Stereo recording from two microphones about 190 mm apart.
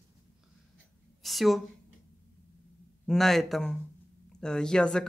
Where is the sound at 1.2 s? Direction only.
Centre (ahead or behind).